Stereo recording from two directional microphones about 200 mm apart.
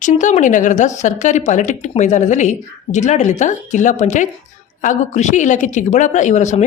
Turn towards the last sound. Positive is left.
turn(degrees=35)  # may be behind; listen again after turning